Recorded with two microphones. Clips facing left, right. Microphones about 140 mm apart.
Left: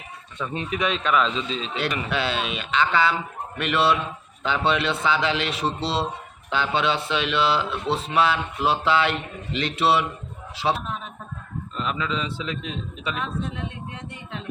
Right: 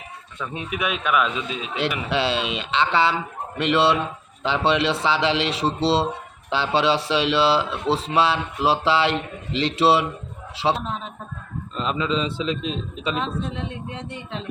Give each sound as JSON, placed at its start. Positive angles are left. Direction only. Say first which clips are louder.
{"t": 0.3, "sound": "speech", "louder": "left 1 dB", "side_deg": -10}
{"t": 2.0, "sound": "speech", "louder": "right 3 dB", "side_deg": -30}